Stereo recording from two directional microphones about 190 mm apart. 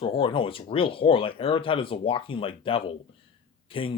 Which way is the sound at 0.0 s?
30° left (ahead or behind).